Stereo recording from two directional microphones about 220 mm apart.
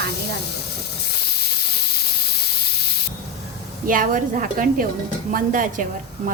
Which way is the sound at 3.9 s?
40° right (ahead or behind).